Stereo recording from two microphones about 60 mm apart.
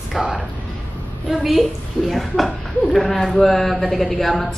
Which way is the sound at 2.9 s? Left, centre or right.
Centre.